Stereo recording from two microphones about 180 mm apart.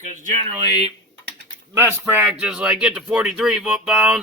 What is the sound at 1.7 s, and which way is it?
Speech, 15° right (ahead or behind).